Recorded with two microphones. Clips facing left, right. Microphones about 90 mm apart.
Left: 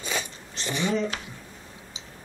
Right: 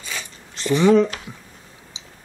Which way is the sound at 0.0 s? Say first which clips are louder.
Left 2 dB; 20° left (ahead or behind).